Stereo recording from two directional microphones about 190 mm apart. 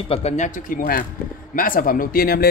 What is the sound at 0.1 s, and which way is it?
Speech, 35° left (ahead or behind).